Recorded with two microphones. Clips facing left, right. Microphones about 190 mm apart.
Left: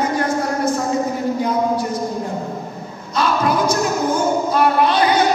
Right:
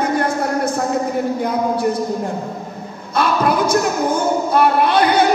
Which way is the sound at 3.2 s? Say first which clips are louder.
Right 1 dB; 60° right (ahead or behind).